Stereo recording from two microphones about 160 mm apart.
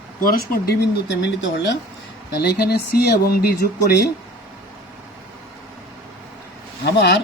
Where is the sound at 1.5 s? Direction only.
90° left.